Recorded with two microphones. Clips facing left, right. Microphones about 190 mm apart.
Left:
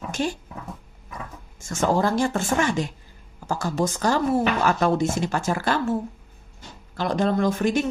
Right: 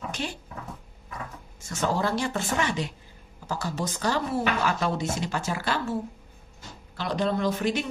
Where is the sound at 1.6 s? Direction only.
45° left (ahead or behind).